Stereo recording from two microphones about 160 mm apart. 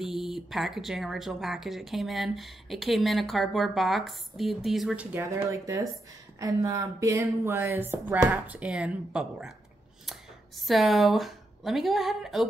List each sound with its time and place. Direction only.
0.0 s speech: centre (ahead or behind)
5.1 s speech: 15° right (ahead or behind)
10.7 s speech: centre (ahead or behind)